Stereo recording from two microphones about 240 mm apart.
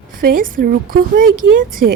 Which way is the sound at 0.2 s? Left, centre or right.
Right.